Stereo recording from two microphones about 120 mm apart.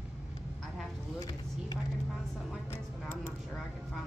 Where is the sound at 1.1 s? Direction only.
35° left (ahead or behind).